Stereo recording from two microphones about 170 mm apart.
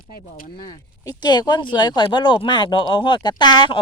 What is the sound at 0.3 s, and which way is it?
Speech, 55° left (ahead or behind).